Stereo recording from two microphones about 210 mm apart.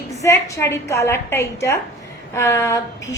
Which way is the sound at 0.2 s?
15° left (ahead or behind).